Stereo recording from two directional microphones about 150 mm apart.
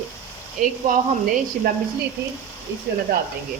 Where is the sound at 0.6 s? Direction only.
65° right (ahead or behind).